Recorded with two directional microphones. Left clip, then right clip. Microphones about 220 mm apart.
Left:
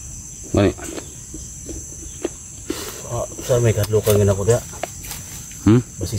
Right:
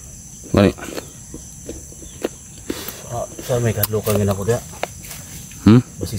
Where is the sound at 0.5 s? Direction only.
50° right (ahead or behind).